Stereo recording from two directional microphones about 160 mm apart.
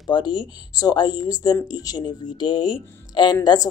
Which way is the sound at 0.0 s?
30° left (ahead or behind).